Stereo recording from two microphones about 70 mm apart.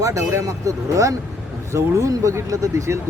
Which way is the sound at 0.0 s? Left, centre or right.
Right.